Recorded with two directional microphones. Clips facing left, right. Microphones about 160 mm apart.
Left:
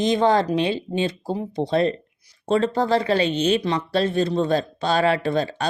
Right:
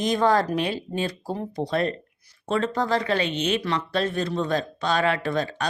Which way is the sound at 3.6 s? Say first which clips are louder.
Left 3 dB; 20° left (ahead or behind).